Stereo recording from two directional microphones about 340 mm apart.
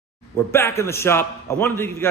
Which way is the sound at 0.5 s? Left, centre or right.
Centre.